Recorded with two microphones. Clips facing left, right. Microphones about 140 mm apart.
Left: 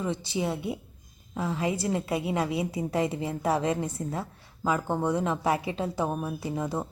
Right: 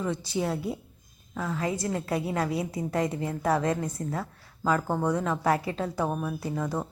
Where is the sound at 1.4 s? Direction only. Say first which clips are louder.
Left 1 dB; 20° left (ahead or behind).